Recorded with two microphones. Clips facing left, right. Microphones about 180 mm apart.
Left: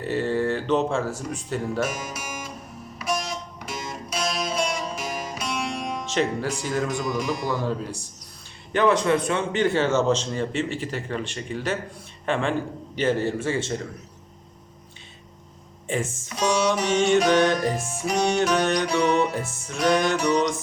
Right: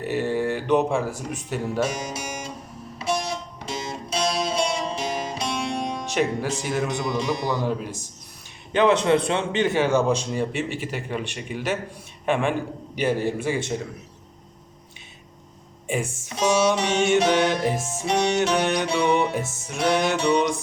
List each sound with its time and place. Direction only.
0.0 s a man's voice: 15° right (ahead or behind)
1.8 s speech: 25° right (ahead or behind)
3.0 s music: 30° right (ahead or behind)
6.1 s speech: 15° right (ahead or behind)
6.6 s music: 20° right (ahead or behind)
8.7 s a man's voice: 20° right (ahead or behind)
15.9 s a man's voice: 15° right (ahead or behind)
16.3 s music: 25° right (ahead or behind)